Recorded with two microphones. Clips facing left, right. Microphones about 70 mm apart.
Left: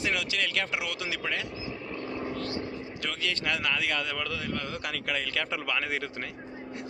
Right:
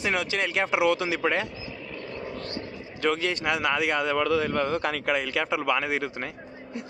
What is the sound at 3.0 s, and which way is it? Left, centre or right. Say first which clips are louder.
A man's voice: right 9 dB; right.